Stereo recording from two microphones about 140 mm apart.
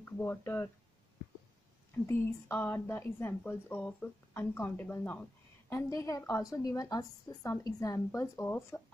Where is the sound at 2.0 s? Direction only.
15° left (ahead or behind).